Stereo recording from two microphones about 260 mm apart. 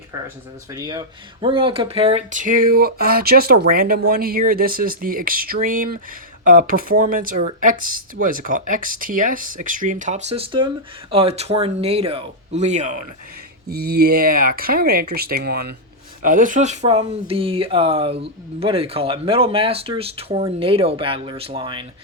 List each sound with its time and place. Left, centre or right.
0.7 s speech: centre